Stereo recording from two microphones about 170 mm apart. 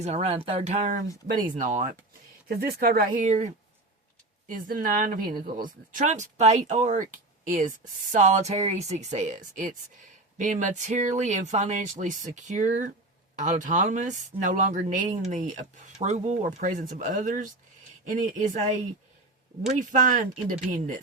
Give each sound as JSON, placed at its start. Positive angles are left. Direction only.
{"t": 0.0, "sound": "speech", "side_deg": -40}
{"t": 2.5, "sound": "speech", "side_deg": -65}
{"t": 19.6, "sound": "speech", "side_deg": -50}